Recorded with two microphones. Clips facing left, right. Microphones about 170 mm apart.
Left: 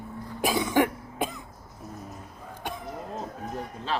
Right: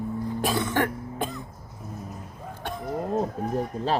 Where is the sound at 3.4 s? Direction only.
40° right (ahead or behind).